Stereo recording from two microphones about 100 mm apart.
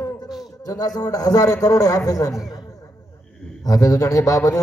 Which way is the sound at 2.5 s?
35° left (ahead or behind).